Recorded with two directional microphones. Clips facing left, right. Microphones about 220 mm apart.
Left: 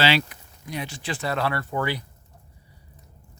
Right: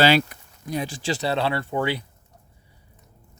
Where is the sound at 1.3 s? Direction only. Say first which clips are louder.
Even; 25° right (ahead or behind).